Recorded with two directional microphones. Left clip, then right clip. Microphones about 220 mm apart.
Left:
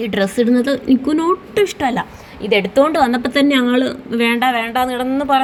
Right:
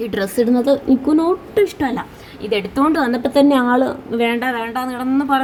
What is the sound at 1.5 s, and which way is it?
A woman's voice, 5° left (ahead or behind).